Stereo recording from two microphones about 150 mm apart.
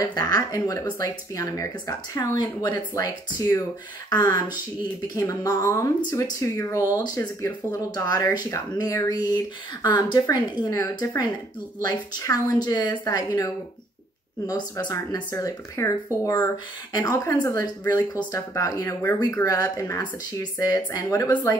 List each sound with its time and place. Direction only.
0.0 s speech: 25° left (ahead or behind)
5.1 s speech: 25° left (ahead or behind)